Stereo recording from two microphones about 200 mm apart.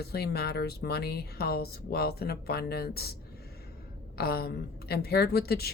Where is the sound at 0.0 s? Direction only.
55° left (ahead or behind).